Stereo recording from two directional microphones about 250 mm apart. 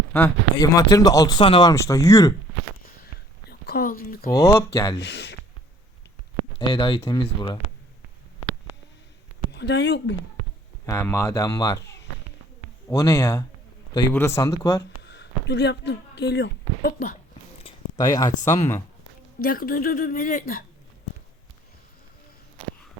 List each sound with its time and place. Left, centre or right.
0.1 s speech: centre
3.5 s speech: left
4.3 s speech: centre
4.9 s speech: left
6.6 s speech: centre
9.5 s speech: left
10.8 s speech: centre
15.0 s speech: left
17.6 s a sound: centre
19.4 s a woman's voice: left